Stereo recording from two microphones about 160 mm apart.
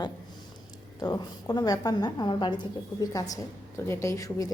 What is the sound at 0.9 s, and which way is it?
A woman's voice, 25° left (ahead or behind).